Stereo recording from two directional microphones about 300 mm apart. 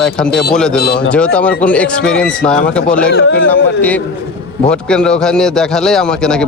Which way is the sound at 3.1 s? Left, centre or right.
Left.